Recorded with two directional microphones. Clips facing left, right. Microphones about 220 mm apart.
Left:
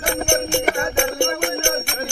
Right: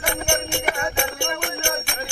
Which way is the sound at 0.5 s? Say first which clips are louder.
Left 5 dB; 50° left (ahead or behind).